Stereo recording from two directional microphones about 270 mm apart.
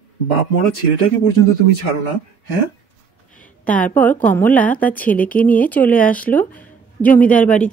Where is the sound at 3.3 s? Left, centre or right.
Centre.